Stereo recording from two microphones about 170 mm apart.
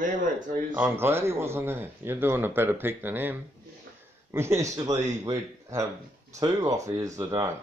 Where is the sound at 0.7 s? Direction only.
15° right (ahead or behind).